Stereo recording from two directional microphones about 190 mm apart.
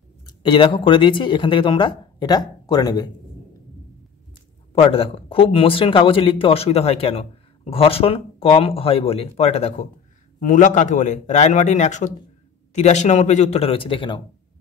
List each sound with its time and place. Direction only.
0.3 s speech: 25° left (ahead or behind)
4.7 s a man's voice: 30° left (ahead or behind)